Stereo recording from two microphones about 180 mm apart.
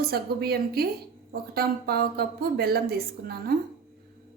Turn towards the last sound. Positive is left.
turn(degrees=-60)  # may be behind; listen again after turning